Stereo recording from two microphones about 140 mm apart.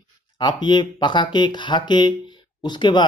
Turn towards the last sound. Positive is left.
turn(degrees=35)  # may be behind; listen again after turning